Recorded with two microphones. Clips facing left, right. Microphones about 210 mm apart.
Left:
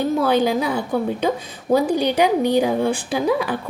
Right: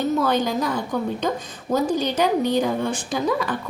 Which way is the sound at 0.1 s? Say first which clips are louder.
Left 3 dB; 10° left (ahead or behind).